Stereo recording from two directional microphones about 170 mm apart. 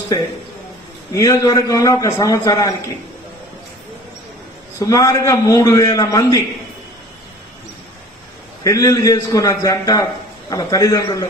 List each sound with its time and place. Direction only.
1.1 s a man's voice: 20° left (ahead or behind)
4.7 s a man's voice: 20° left (ahead or behind)
8.6 s a man's voice: 20° left (ahead or behind)